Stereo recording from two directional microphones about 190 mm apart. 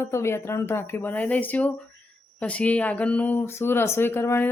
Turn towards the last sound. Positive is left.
turn(degrees=10)  # may be behind; listen again after turning